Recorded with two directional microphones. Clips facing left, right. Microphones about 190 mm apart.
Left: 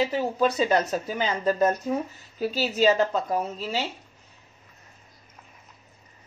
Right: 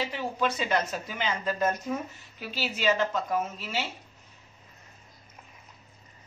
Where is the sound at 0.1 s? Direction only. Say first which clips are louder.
Left 6 dB; 35° left (ahead or behind).